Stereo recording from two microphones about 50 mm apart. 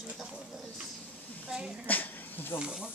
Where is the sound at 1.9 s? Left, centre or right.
Left.